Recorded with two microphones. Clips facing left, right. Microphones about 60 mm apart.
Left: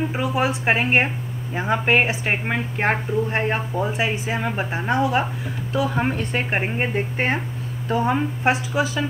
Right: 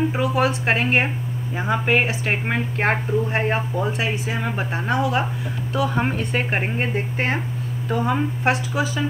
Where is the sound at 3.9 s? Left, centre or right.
Left.